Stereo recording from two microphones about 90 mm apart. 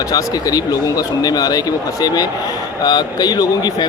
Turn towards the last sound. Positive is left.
turn(degrees=50)  # may be behind; listen again after turning